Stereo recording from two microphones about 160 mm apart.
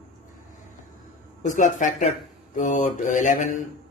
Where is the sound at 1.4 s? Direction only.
50° left (ahead or behind).